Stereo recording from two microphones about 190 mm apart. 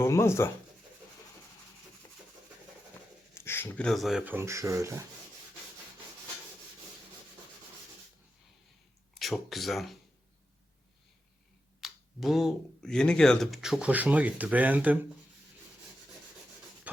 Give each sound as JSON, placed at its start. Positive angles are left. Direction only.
{"t": 0.0, "sound": "speech", "side_deg": 15}
{"t": 3.3, "sound": "speech", "side_deg": 10}
{"t": 4.4, "sound": "speech", "side_deg": -15}
{"t": 9.1, "sound": "speech", "side_deg": 0}
{"t": 11.8, "sound": "speech", "side_deg": 0}
{"t": 16.9, "sound": "a sound", "side_deg": -10}